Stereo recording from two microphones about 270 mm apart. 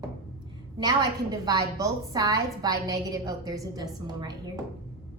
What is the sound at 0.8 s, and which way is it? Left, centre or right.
A woman's voice, centre.